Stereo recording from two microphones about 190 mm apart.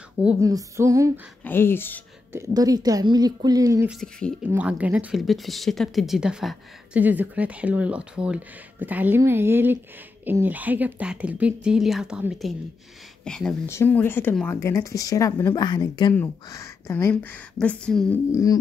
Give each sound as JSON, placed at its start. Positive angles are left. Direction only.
{"t": 0.4, "sound": "a woman's voice", "side_deg": -15}
{"t": 1.4, "sound": "speech", "side_deg": 10}
{"t": 2.3, "sound": "a woman's voice", "side_deg": -20}
{"t": 4.5, "sound": "a woman's voice", "side_deg": -5}
{"t": 18.3, "sound": "speech", "side_deg": 15}